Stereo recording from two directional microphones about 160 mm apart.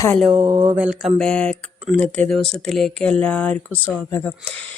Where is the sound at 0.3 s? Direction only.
15° right (ahead or behind).